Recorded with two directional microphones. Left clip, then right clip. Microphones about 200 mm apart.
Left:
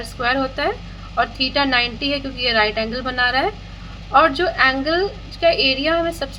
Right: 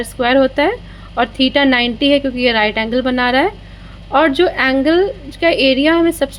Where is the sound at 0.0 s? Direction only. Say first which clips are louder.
Right 7 dB; 40° right (ahead or behind).